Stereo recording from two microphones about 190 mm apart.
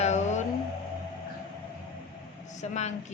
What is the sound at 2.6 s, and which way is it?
Speech, 35° left (ahead or behind).